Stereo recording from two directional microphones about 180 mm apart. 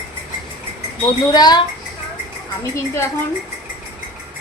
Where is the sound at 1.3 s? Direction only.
20° left (ahead or behind).